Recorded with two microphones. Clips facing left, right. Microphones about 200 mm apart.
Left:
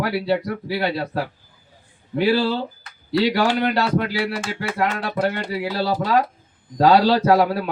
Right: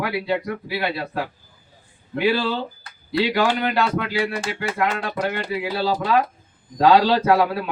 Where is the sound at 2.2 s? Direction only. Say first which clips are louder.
Left 2 dB; 40° left (ahead or behind).